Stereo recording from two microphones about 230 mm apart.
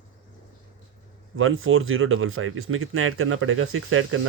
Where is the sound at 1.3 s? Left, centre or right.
Right.